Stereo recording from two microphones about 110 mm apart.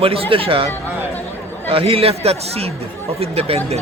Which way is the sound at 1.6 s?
65° right (ahead or behind).